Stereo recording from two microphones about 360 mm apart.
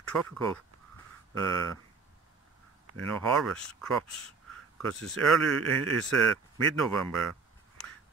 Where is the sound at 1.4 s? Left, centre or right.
Centre.